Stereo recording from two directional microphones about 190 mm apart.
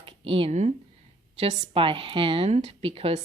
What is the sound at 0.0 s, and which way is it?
A woman's voice, 30° right (ahead or behind).